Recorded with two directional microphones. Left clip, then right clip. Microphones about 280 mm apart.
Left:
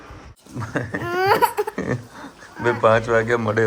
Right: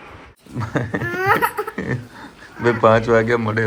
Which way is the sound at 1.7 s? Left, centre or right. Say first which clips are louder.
Even; centre.